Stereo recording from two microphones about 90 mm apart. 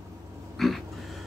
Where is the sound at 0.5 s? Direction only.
Centre (ahead or behind).